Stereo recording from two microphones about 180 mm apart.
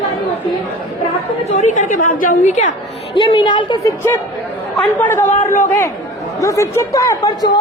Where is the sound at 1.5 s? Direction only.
40° left (ahead or behind).